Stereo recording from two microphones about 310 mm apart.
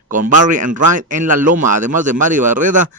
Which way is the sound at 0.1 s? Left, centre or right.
Right.